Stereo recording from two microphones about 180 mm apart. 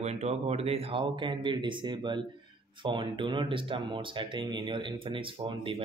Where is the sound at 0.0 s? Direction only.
35° right (ahead or behind).